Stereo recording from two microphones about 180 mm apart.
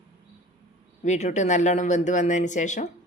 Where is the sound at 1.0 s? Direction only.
40° left (ahead or behind).